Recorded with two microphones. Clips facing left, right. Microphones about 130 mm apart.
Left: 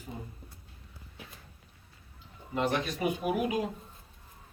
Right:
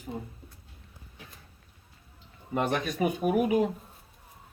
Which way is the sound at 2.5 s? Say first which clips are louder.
Right 2 dB; 50° right (ahead or behind).